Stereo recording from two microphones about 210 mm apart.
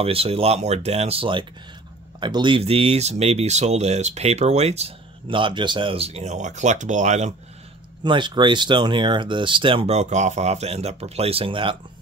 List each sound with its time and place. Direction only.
0.0 s speech: 30° right (ahead or behind)
8.0 s speech: 20° right (ahead or behind)